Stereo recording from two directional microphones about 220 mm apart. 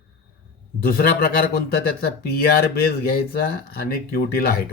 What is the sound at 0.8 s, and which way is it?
Speech, 45° left (ahead or behind).